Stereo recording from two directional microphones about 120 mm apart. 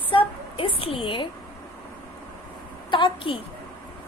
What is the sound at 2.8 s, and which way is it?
Speech, 40° left (ahead or behind).